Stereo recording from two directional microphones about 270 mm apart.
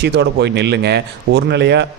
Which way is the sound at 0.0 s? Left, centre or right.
Right.